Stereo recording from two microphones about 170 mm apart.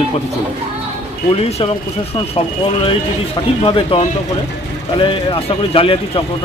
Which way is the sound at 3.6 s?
30° left (ahead or behind).